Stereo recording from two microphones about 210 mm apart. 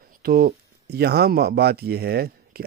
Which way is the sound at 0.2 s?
45° right (ahead or behind).